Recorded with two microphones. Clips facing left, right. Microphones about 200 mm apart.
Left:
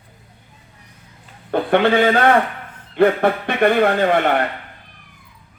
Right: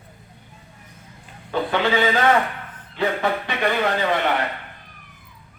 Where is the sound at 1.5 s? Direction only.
55° left (ahead or behind).